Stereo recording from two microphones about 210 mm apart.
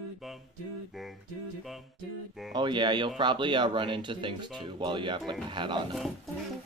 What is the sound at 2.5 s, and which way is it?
Speech, 20° right (ahead or behind).